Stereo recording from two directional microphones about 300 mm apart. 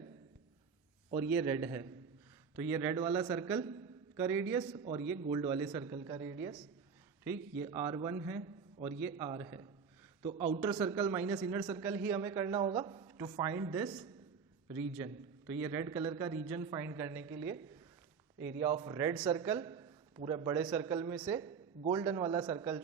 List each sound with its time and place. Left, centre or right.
1.1 s a man's voice: centre
10.7 s a man's voice: centre
18.3 s a man's voice: right
18.6 s a man's voice: centre